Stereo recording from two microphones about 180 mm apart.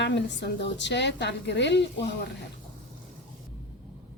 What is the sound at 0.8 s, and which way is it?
A woman's voice, 75° left (ahead or behind).